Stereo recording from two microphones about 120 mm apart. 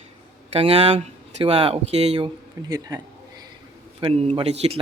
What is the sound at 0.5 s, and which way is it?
Speech, 55° right (ahead or behind).